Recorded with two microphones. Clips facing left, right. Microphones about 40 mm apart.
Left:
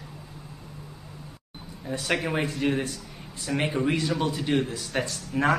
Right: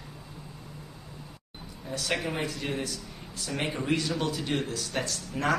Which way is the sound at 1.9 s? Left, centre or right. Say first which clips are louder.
Left 4 dB; centre.